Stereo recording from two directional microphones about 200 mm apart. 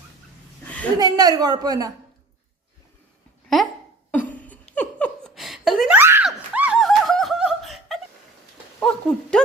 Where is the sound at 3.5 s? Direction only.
Centre (ahead or behind).